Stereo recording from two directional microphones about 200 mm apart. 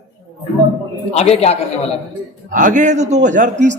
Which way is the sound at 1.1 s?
30° left (ahead or behind).